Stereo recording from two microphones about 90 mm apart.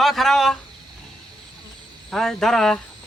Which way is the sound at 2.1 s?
5° left (ahead or behind).